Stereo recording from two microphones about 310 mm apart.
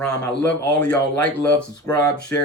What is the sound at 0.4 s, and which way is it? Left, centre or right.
Speech, centre.